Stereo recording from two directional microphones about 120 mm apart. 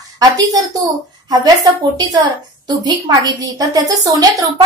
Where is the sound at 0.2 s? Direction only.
30° right (ahead or behind).